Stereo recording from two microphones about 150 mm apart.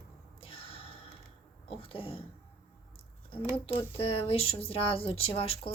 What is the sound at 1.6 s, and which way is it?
Speech, 40° left (ahead or behind).